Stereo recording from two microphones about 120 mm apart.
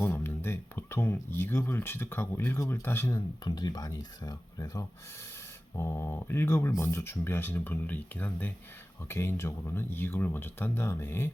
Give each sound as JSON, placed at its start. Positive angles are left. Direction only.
{"t": 0.0, "sound": "speech", "side_deg": 20}
{"t": 3.2, "sound": "speech", "side_deg": 35}
{"t": 5.7, "sound": "speech", "side_deg": 20}